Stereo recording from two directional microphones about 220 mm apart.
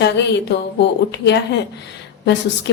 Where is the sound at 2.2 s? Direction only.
50° left (ahead or behind).